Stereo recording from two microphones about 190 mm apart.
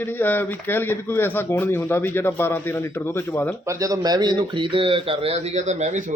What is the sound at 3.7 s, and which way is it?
Speech, 20° right (ahead or behind).